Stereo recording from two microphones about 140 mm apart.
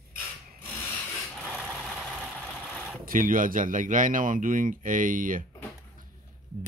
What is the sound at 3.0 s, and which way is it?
Speech, 80° right.